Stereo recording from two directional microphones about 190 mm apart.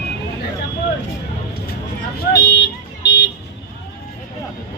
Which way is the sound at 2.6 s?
65° left (ahead or behind).